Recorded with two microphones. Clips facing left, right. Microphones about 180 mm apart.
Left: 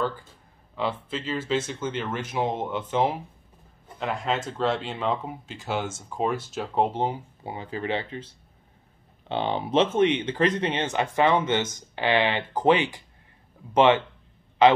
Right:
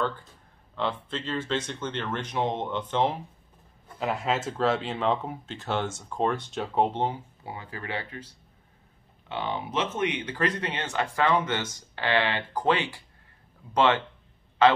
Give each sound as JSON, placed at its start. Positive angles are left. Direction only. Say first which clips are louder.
{"t": 0.7, "sound": "speech", "louder": "left 1 dB", "side_deg": 5}
{"t": 4.0, "sound": "speech", "louder": "even", "side_deg": -5}
{"t": 7.4, "sound": "speech", "louder": "left 7 dB", "side_deg": 20}
{"t": 9.3, "sound": "speech", "louder": "left 6 dB", "side_deg": 30}